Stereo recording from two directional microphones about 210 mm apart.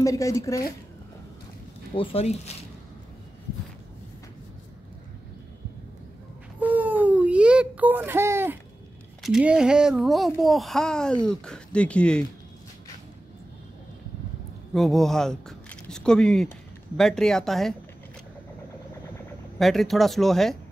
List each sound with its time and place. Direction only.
0.0 s speech: 15° left (ahead or behind)
2.0 s speech: 30° left (ahead or behind)
6.6 s baby cry: 10° right (ahead or behind)
9.2 s a child's voice: 5° right (ahead or behind)
14.7 s speech: centre (ahead or behind)
19.6 s a child's voice: centre (ahead or behind)